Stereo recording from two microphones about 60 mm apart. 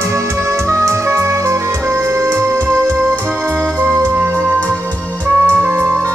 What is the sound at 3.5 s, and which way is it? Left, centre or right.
Music, right.